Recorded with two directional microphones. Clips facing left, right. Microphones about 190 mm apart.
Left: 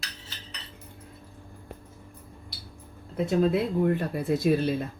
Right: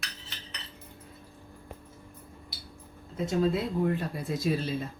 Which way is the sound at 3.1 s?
60° left (ahead or behind).